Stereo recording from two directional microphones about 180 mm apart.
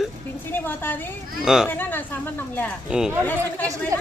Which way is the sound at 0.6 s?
10° left (ahead or behind).